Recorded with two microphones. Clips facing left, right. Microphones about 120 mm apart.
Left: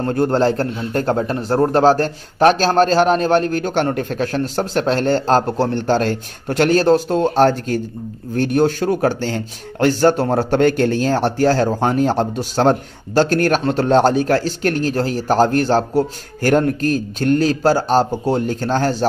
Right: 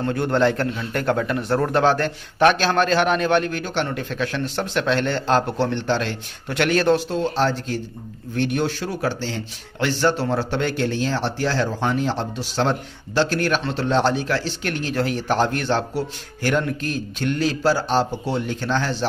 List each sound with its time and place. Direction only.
0.0 s a man's voice: 40° left (ahead or behind)